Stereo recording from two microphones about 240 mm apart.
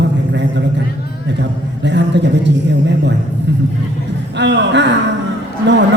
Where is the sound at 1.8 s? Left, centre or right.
Right.